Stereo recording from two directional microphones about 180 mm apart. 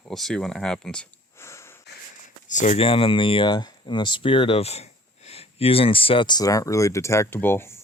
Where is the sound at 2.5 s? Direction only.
40° left (ahead or behind).